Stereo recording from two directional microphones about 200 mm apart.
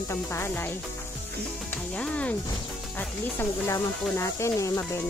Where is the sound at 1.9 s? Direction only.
5° left (ahead or behind).